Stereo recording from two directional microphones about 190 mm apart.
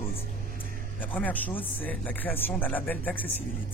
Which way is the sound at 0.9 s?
10° left (ahead or behind).